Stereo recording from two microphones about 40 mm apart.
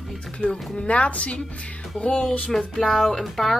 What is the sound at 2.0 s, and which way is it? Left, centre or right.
Speech, left.